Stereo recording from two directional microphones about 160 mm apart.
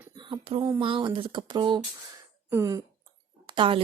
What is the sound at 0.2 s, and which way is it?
Speech, 30° right (ahead or behind).